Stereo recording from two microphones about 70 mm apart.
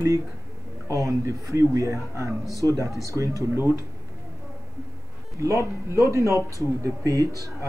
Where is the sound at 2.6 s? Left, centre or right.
Left.